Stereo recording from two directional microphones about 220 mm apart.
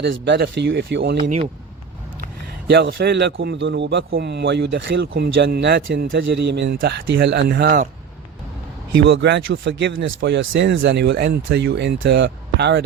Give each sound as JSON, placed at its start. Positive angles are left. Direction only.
{"t": 0.0, "sound": "a man's voice", "side_deg": -50}
{"t": 2.2, "sound": "a man's voice", "side_deg": -45}
{"t": 9.0, "sound": "a man's voice", "side_deg": -55}